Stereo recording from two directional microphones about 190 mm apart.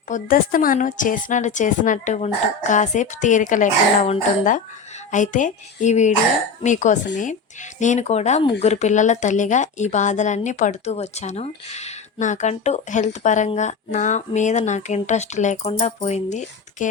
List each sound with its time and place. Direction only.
0.1 s speech: 45° left (ahead or behind)